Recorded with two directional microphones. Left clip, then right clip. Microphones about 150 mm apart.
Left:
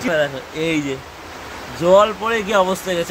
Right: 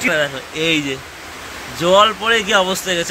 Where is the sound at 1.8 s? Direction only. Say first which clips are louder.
Right 1 dB; centre (ahead or behind).